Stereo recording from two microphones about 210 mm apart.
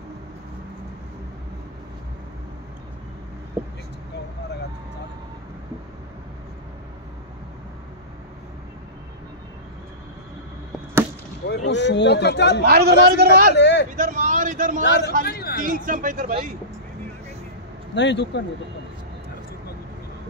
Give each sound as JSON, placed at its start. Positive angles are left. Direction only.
{"t": 11.4, "sound": "a man's voice", "side_deg": 55}
{"t": 12.6, "sound": "a man's voice", "side_deg": -50}
{"t": 13.6, "sound": "speech", "side_deg": 55}
{"t": 13.9, "sound": "a man's voice", "side_deg": -40}
{"t": 14.8, "sound": "a man's voice", "side_deg": 55}
{"t": 15.2, "sound": "a sound", "side_deg": 45}
{"t": 15.6, "sound": "a man's voice", "side_deg": -40}
{"t": 17.9, "sound": "a man's voice", "side_deg": 55}